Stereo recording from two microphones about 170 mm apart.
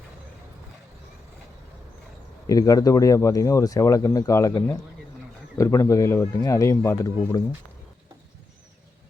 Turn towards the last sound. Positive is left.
turn(degrees=20)  # may be behind; listen again after turning